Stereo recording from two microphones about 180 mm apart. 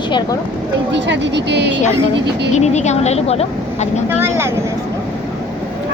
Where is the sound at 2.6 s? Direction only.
40° left (ahead or behind).